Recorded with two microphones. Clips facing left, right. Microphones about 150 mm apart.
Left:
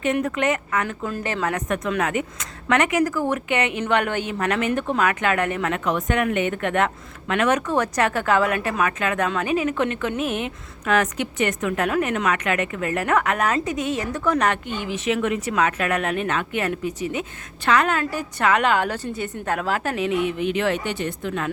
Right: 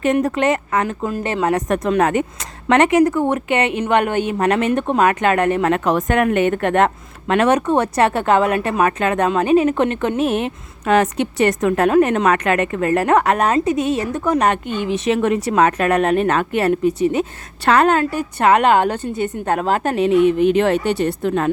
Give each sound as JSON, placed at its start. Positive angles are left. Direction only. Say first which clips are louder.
{"t": 0.0, "sound": "a woman's voice", "louder": "right 5 dB", "side_deg": -40}
{"t": 1.0, "sound": "a woman's voice", "louder": "right 6 dB", "side_deg": -25}
{"t": 5.7, "sound": "a woman's voice", "louder": "right 6 dB", "side_deg": -45}
{"t": 15.0, "sound": "a woman's voice", "louder": "right 4 dB", "side_deg": -35}